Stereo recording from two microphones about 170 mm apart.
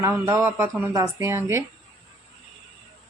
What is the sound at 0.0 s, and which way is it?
A woman's voice, 15° right (ahead or behind).